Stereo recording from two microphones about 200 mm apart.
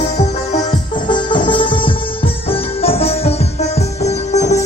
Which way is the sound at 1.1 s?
25° left (ahead or behind).